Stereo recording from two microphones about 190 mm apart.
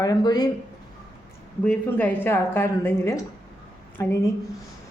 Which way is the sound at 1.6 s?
5° left (ahead or behind).